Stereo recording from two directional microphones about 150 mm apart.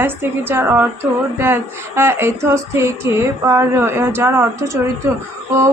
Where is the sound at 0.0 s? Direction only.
15° right (ahead or behind).